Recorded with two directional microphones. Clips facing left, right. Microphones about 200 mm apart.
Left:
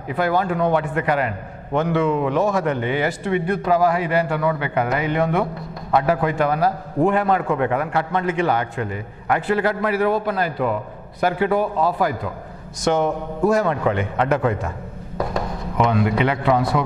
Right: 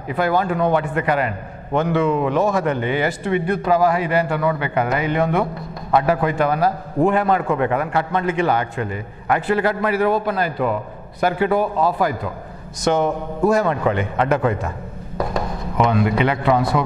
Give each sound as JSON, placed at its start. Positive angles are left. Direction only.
{"t": 0.1, "sound": "a man's voice", "side_deg": -15}